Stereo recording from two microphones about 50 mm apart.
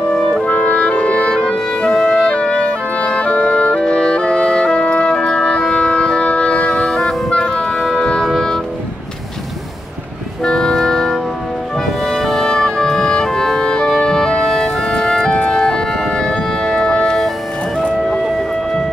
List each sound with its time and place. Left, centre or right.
0.1 s clarinet: centre
0.5 s music: left
1.9 s music: centre
6.8 s music: centre
10.4 s music: centre